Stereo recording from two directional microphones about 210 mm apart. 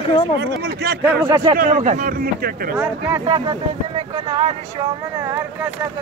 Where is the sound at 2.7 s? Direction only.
15° right (ahead or behind).